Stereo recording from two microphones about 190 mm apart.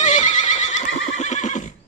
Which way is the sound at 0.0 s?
40° left (ahead or behind).